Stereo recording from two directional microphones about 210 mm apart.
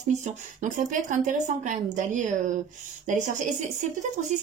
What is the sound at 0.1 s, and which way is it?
A woman's voice, 35° right (ahead or behind).